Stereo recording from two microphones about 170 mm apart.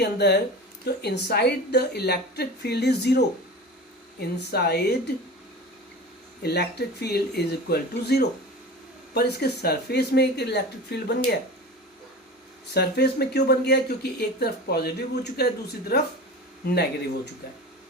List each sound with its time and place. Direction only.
0.0 s speech: 75° left (ahead or behind)
6.4 s speech: 70° left (ahead or behind)
12.7 s speech: 70° left (ahead or behind)